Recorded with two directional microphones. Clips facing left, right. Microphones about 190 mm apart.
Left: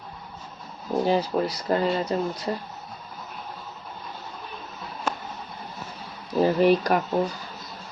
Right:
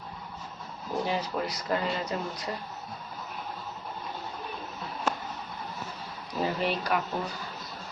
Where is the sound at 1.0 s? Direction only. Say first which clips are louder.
Left 9 dB; 35° left (ahead or behind).